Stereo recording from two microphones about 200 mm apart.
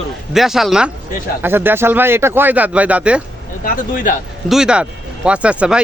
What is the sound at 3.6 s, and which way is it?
Speech, 40° left (ahead or behind).